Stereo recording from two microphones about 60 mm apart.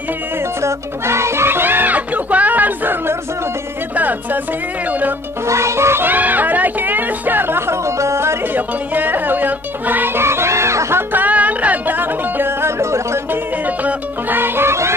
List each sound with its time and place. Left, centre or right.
0.6 s speech: right
5.5 s music: right
6.0 s music: right
8.5 s music: right
11.1 s music: right
13.7 s music: right